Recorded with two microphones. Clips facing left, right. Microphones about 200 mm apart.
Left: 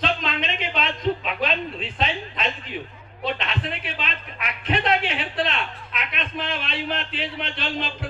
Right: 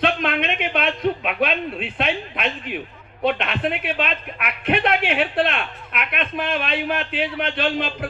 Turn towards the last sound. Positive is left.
turn(degrees=-55)  # may be behind; listen again after turning